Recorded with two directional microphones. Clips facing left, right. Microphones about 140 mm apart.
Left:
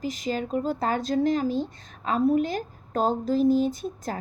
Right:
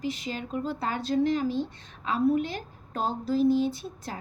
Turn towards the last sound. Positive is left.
turn(degrees=45)  # may be behind; listen again after turning